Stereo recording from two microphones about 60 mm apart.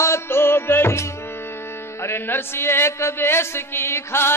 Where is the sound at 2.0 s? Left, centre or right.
Left.